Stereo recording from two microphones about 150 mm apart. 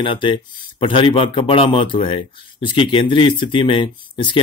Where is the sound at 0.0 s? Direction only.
35° left (ahead or behind).